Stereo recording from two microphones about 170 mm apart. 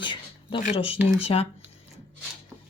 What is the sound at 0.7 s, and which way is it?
Speech, 35° left (ahead or behind).